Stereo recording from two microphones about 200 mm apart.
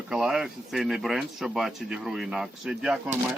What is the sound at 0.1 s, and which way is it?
Speech, 5° right (ahead or behind).